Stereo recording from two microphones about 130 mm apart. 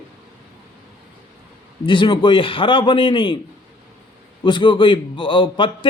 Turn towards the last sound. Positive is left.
turn(degrees=40)  # may be behind; listen again after turning